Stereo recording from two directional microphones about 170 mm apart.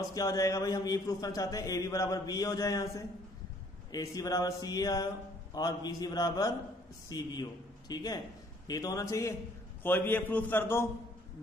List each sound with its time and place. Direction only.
0.1 s a man's voice: 20° left (ahead or behind)